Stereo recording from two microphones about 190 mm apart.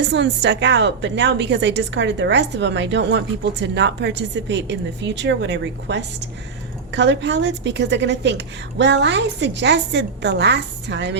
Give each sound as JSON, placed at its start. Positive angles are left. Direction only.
{"t": 0.0, "sound": "a woman's voice", "side_deg": -65}